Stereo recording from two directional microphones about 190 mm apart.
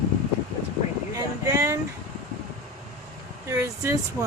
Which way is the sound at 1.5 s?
15° right (ahead or behind).